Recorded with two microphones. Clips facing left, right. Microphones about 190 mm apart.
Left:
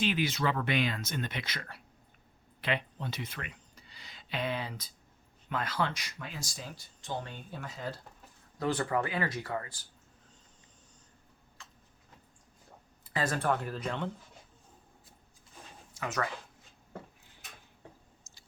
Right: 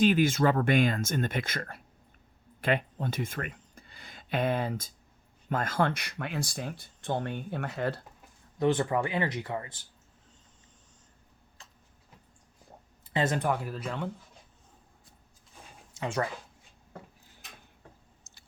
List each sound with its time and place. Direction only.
0.0 s speech: 45° right (ahead or behind); by 8.0 s 65° right (ahead or behind)
8.5 s speech: 25° right (ahead or behind)
13.1 s speech: 20° right (ahead or behind)
13.6 s speech: 5° right (ahead or behind)
16.0 s speech: 30° right (ahead or behind)
18.2 s squish: 60° right (ahead or behind)